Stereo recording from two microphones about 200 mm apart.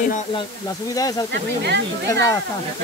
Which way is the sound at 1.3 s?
55° right (ahead or behind).